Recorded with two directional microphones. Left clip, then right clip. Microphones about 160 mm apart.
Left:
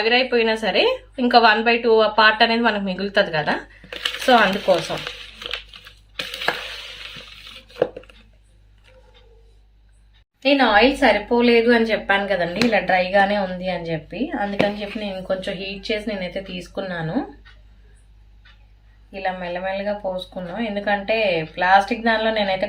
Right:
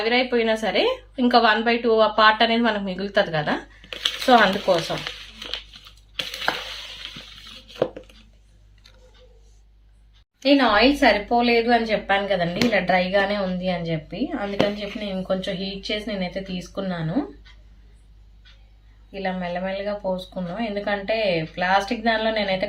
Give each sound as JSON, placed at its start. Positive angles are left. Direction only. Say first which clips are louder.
{"t": 0.0, "sound": "a woman's voice", "louder": "left 3 dB", "side_deg": 5}
{"t": 6.1, "sound": "a sound", "louder": "left 1 dB", "side_deg": 5}
{"t": 10.4, "sound": "a woman's voice", "louder": "left 2 dB", "side_deg": 10}
{"t": 11.3, "sound": "a woman's voice", "louder": "left 3 dB", "side_deg": 30}
{"t": 12.5, "sound": "a woman's voice", "louder": "left 3 dB", "side_deg": 5}
{"t": 15.3, "sound": "speech", "louder": "left 1 dB", "side_deg": 20}
{"t": 19.1, "sound": "a woman's voice", "louder": "left 2 dB", "side_deg": 10}